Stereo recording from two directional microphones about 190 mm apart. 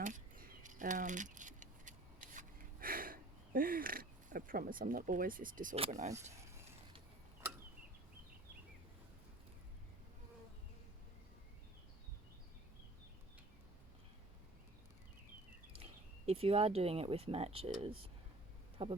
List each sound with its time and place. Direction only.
0.0 s keys jangling: 45° right (ahead or behind)
5.7 s speech: 35° right (ahead or behind)
6.3 s a sound: 15° right (ahead or behind)
15.8 s speech: 30° right (ahead or behind)